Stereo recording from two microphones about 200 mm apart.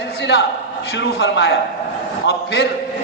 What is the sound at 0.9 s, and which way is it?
A woman's voice, 65° left (ahead or behind).